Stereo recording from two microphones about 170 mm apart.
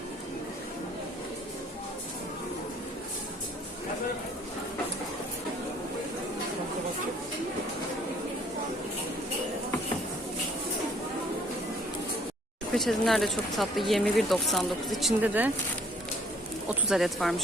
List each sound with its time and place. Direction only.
12.7 s speech: centre (ahead or behind)
15.2 s speech: 10° right (ahead or behind)
16.6 s speech: centre (ahead or behind)